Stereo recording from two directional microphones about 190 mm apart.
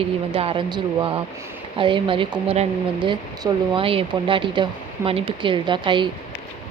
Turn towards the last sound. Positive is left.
turn(degrees=-25)  # may be behind; listen again after turning